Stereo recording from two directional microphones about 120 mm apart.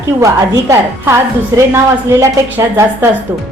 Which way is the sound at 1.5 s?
25° right (ahead or behind).